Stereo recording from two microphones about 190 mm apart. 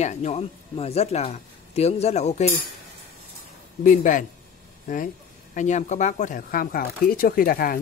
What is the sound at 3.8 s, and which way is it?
Speech, 45° left (ahead or behind).